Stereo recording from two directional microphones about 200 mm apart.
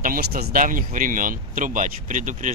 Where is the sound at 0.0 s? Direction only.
45° right (ahead or behind).